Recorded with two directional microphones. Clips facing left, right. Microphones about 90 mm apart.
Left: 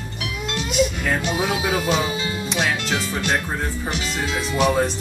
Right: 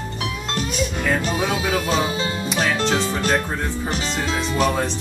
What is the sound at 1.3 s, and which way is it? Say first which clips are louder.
Speech: even; 10° left (ahead or behind).